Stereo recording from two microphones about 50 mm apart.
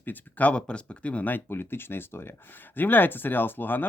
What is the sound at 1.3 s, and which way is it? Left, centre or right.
Speech, left.